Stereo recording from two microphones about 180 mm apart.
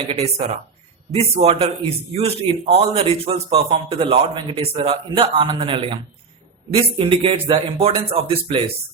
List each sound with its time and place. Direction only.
0.1 s a man's voice: 35° right (ahead or behind)
7.0 s a man's voice: 30° right (ahead or behind)